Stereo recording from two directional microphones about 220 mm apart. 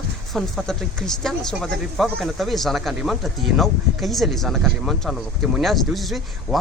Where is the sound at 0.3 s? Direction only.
Centre (ahead or behind).